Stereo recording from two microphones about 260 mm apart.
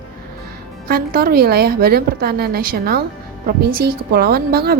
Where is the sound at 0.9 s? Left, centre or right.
Right.